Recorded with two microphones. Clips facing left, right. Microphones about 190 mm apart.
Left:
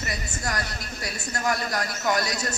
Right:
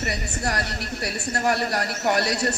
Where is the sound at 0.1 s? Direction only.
35° right (ahead or behind).